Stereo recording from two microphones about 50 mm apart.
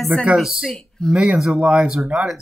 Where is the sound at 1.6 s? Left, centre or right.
Right.